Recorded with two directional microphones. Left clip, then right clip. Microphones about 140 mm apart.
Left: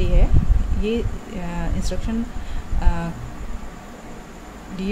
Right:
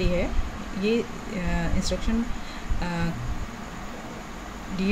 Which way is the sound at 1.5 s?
Centre (ahead or behind).